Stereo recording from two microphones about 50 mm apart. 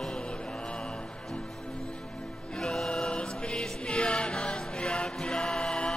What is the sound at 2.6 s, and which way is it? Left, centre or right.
Music, centre.